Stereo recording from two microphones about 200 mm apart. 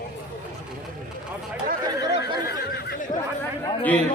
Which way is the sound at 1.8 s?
20° right (ahead or behind).